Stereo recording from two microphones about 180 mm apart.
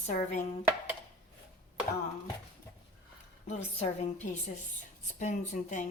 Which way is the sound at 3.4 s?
40° left (ahead or behind).